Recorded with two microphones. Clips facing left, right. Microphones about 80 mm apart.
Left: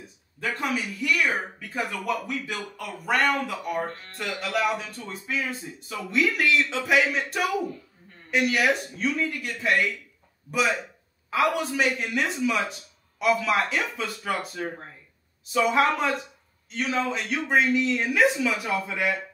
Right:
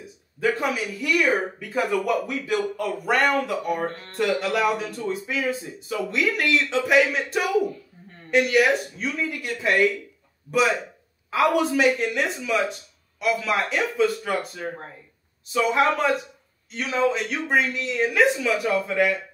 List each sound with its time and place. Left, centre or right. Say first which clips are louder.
0.4 s speech: right 4 dB; centre
3.8 s speech: right 5 dB; right
4.4 s speech: right 3 dB; centre